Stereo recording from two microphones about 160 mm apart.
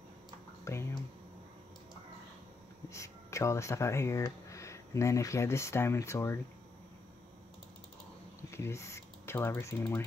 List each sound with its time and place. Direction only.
0.7 s speech: 20° left (ahead or behind)
2.9 s speech: 20° left (ahead or behind)
8.4 s speech: 15° left (ahead or behind)